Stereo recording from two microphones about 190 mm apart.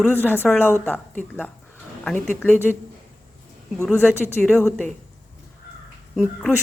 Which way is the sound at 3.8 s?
10° left (ahead or behind).